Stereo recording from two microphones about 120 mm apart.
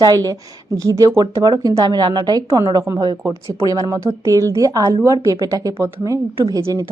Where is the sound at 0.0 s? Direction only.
30° right (ahead or behind).